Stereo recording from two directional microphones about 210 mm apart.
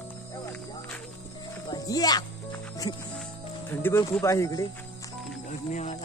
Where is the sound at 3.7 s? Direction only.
10° left (ahead or behind).